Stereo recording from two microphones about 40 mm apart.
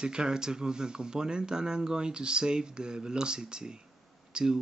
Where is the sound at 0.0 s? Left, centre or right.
Right.